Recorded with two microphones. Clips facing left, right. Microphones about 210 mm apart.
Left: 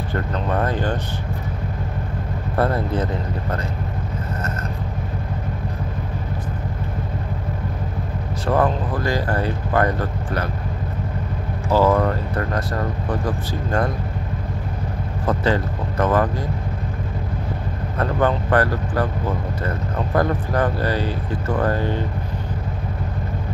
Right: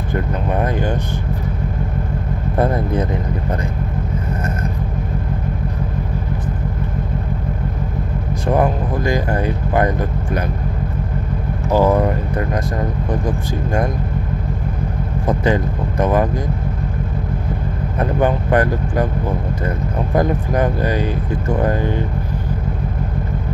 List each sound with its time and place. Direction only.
0.1 s vehicle: 15° right (ahead or behind)
2.5 s vehicle: 15° right (ahead or behind)
8.5 s vehicle: 15° right (ahead or behind)
11.7 s vehicle: 15° right (ahead or behind)
15.2 s vehicle: 15° right (ahead or behind)
17.9 s speech: 15° right (ahead or behind)
20.2 s speech: 15° right (ahead or behind)